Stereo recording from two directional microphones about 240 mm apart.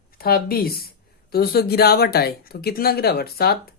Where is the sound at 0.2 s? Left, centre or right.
Left.